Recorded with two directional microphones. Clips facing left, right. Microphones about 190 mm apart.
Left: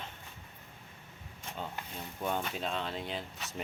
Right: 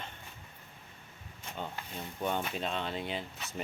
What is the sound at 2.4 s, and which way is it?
Speech, centre (ahead or behind).